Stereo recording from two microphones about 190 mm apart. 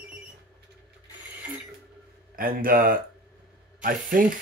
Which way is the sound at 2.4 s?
50° right (ahead or behind).